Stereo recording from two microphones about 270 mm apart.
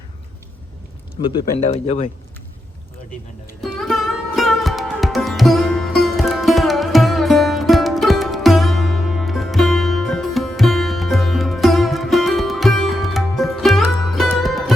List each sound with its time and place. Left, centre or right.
1.2 s speech: centre
3.6 s music: centre